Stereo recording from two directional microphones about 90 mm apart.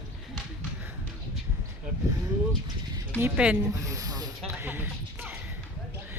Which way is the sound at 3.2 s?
15° right (ahead or behind).